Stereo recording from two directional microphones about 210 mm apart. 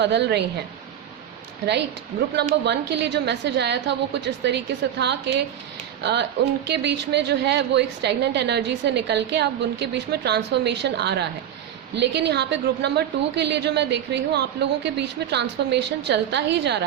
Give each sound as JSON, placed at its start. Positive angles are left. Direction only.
{"t": 0.0, "sound": "a woman's voice", "side_deg": -55}
{"t": 2.3, "sound": "a woman's voice", "side_deg": -55}